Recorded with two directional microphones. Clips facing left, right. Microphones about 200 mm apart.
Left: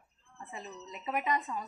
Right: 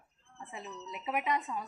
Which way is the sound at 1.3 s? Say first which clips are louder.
Even; centre (ahead or behind).